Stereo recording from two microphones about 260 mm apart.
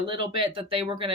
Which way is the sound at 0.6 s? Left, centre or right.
Right.